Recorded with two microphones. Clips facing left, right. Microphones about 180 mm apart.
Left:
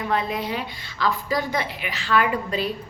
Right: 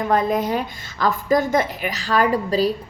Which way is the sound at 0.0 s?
45° right (ahead or behind).